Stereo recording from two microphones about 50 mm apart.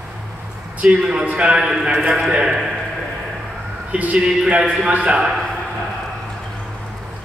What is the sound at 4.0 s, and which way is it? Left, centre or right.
A man's voice, right.